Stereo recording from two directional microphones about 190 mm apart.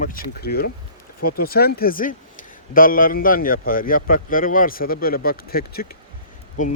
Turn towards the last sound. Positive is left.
turn(degrees=40)  # may be behind; listen again after turning